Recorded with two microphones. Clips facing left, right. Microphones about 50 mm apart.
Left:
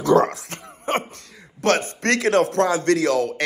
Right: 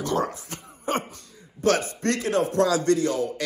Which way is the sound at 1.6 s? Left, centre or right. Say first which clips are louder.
Left 2 dB; left.